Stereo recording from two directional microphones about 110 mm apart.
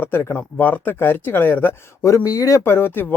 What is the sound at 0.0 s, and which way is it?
Speech, 20° left (ahead or behind).